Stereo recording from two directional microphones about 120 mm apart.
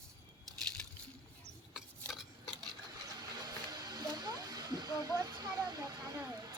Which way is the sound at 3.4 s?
35° right (ahead or behind).